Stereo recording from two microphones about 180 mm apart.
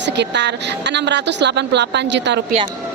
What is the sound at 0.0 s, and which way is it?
Speech, 70° right (ahead or behind).